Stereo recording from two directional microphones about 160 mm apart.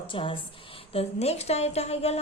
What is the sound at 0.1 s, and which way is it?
Speech, 35° left (ahead or behind).